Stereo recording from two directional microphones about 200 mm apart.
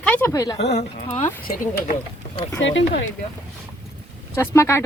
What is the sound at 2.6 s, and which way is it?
Speech, 70° left (ahead or behind).